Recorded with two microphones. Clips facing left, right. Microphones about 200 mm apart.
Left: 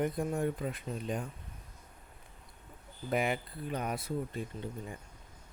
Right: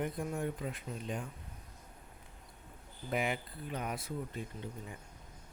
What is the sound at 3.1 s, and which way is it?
Speech, 45° left (ahead or behind).